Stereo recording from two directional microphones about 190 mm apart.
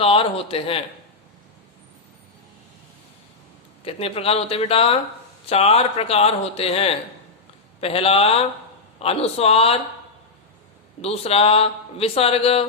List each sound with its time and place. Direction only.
0.0 s speech: 30° left (ahead or behind)
3.8 s a man's voice: 30° left (ahead or behind)
11.0 s a man's voice: 30° left (ahead or behind)